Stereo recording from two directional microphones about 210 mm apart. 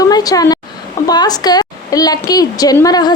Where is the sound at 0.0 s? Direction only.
15° left (ahead or behind).